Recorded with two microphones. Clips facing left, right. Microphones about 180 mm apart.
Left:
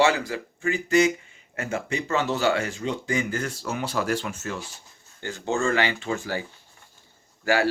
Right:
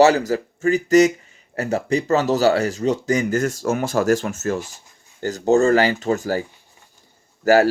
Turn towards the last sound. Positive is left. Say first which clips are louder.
# right 8 dB
turn(degrees=-40)  # may be behind; listen again after turning